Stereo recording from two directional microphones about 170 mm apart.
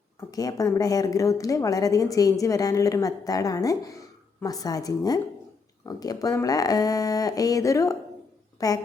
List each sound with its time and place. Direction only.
0.3 s a woman's voice: 20° left (ahead or behind)